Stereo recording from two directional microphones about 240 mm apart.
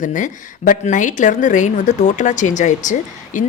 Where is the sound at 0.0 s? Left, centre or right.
Left.